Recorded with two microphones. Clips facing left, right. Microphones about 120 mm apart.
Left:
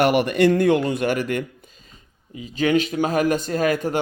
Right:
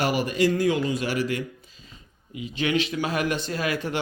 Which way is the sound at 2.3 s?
35° left (ahead or behind).